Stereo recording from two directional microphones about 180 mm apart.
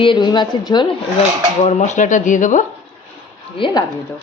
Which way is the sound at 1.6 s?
40° left (ahead or behind).